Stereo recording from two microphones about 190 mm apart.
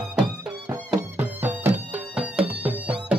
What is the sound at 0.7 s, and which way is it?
Music, 10° right (ahead or behind).